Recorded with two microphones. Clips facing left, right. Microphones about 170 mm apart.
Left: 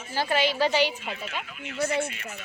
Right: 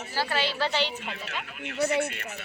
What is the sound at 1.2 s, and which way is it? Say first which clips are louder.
Speech: left 1 dB; 65° right (ahead or behind).